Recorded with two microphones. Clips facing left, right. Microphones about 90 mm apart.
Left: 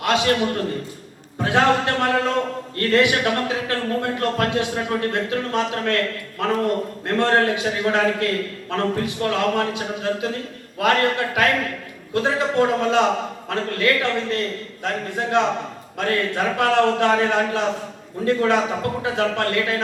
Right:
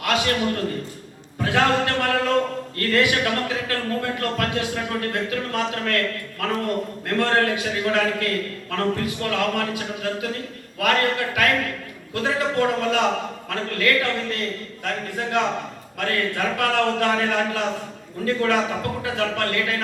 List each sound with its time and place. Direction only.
0.0 s a man's voice: 25° left (ahead or behind)